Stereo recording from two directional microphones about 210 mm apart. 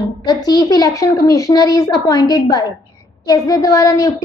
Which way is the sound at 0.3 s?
20° left (ahead or behind).